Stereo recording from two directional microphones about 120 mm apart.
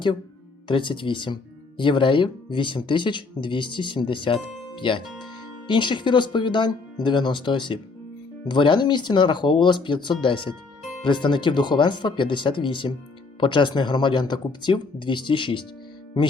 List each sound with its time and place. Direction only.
0.7 s speech: 45° left (ahead or behind)
5.0 s speech: centre (ahead or behind)
5.6 s speech: 40° left (ahead or behind)